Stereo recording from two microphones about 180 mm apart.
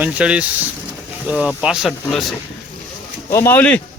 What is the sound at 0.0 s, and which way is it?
Speech, 5° right (ahead or behind).